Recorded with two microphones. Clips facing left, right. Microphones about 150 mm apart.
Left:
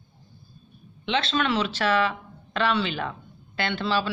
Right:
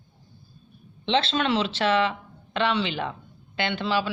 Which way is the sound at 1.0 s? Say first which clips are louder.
Right 1 dB; 30° right (ahead or behind).